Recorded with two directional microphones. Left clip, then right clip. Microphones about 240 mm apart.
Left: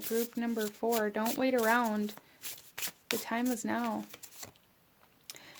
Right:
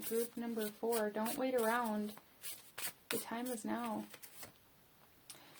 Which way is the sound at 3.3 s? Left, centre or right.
Left.